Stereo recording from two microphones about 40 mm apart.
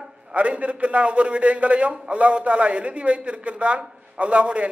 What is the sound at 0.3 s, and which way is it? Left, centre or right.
A man's voice, right.